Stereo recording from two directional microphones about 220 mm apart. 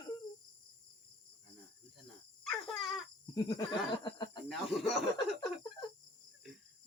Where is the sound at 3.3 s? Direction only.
20° left (ahead or behind).